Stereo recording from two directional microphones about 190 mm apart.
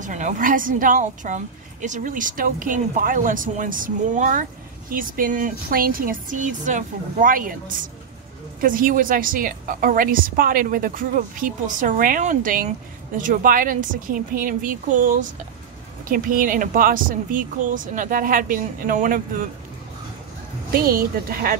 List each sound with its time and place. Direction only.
0.0 s a woman's voice: 40° right (ahead or behind)
20.7 s a woman's voice: 50° right (ahead or behind)